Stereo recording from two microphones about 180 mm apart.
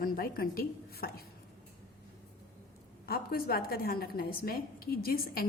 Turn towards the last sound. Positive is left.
turn(degrees=55)  # may be behind; listen again after turning